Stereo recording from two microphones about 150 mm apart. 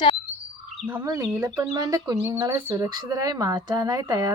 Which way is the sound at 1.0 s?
25° right (ahead or behind).